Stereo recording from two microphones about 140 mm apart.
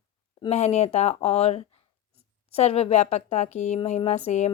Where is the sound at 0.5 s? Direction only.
50° left (ahead or behind).